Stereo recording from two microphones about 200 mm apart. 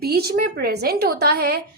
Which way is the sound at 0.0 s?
50° right (ahead or behind).